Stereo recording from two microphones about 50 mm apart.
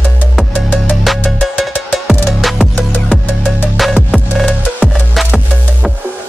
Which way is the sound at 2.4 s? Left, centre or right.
Centre.